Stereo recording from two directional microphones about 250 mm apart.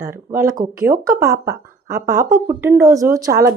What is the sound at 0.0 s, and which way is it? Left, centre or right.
Speech, centre.